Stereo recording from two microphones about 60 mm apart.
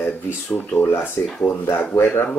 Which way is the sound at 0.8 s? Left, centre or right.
Left.